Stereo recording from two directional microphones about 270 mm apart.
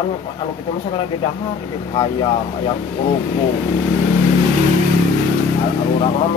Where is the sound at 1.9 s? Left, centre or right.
Centre.